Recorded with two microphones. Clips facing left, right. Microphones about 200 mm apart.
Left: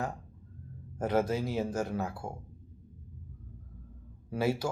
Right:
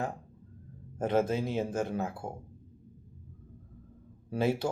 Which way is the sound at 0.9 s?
25° right (ahead or behind).